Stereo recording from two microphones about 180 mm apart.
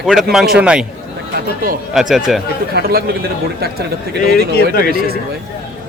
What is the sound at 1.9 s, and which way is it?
Speech, centre (ahead or behind).